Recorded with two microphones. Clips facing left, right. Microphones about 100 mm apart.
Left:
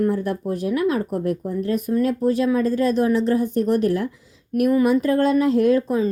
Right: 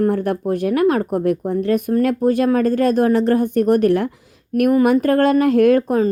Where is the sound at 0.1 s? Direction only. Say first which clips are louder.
Right 4 dB; 60° right (ahead or behind).